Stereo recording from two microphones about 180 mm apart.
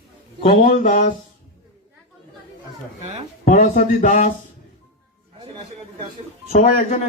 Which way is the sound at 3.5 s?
45° left (ahead or behind).